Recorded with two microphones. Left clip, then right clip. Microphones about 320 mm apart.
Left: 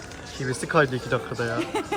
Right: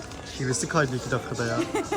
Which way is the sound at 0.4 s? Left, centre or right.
Centre.